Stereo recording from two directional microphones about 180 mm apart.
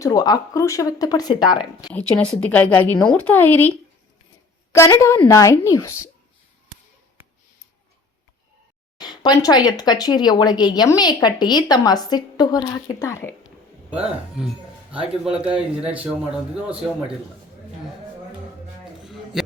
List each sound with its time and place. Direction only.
0.0 s speech: 20° left (ahead or behind)
1.9 s a woman's voice: 5° left (ahead or behind)
4.9 s a woman's voice: 15° left (ahead or behind)
9.0 s speech: 25° left (ahead or behind)
14.3 s a sound: 5° right (ahead or behind)
15.0 s a man's voice: 5° right (ahead or behind)
19.0 s a sound: centre (ahead or behind)